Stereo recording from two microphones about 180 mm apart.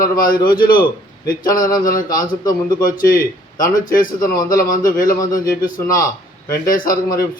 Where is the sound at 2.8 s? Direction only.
50° left (ahead or behind).